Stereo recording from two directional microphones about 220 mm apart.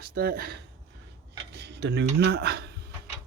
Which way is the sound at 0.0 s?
45° right (ahead or behind).